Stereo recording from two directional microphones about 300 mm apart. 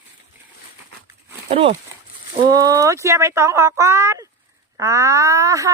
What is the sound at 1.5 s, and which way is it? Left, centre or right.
Speech, centre.